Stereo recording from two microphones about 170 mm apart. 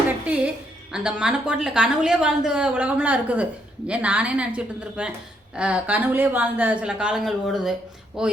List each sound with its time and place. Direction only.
0.3 s a woman's voice: 5° right (ahead or behind)